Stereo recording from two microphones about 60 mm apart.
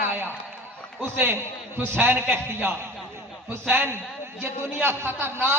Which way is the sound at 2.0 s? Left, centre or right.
Right.